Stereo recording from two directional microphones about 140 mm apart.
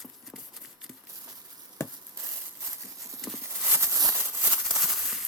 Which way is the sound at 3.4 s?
20° right (ahead or behind).